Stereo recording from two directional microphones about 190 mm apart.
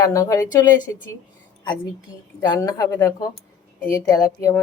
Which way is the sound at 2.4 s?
20° left (ahead or behind).